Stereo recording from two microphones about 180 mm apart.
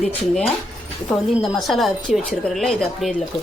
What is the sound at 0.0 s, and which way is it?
Speech, 5° left (ahead or behind).